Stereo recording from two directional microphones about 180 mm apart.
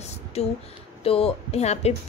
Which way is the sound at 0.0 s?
35° left (ahead or behind).